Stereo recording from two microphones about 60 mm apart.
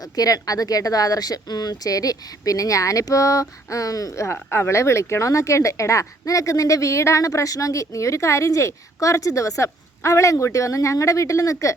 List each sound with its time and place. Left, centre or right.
0.2 s speech: left
4.3 s speech: left